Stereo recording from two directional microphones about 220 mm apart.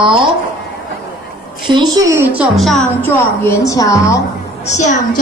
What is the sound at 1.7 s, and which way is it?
A woman's voice, 20° right (ahead or behind).